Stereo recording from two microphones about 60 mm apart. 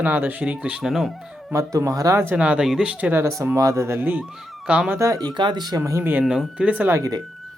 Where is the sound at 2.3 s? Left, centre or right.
Right.